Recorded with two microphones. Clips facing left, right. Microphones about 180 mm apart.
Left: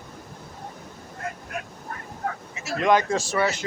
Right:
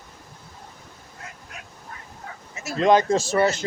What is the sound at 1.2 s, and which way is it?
Vehicle, 55° left (ahead or behind).